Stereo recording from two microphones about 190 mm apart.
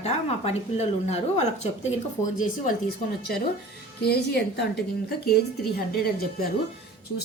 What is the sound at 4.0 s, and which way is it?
A woman's voice, 55° left (ahead or behind).